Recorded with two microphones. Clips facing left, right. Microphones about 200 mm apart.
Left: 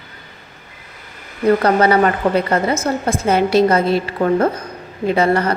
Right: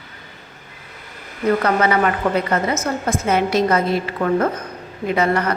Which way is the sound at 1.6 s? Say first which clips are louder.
Left 4 dB; 35° left (ahead or behind).